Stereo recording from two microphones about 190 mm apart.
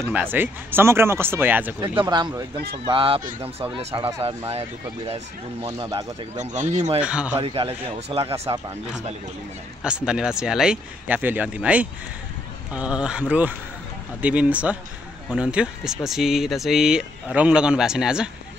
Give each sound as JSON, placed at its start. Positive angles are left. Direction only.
{"t": 0.1, "sound": "speech", "side_deg": -10}
{"t": 1.8, "sound": "speech", "side_deg": -25}
{"t": 6.3, "sound": "speech", "side_deg": -40}
{"t": 7.0, "sound": "speech", "side_deg": -5}
{"t": 7.3, "sound": "speech", "side_deg": -30}
{"t": 9.8, "sound": "speech", "side_deg": -5}